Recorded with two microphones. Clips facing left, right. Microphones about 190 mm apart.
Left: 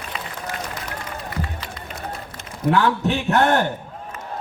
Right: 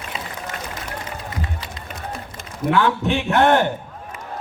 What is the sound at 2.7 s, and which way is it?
Speech, 40° left (ahead or behind).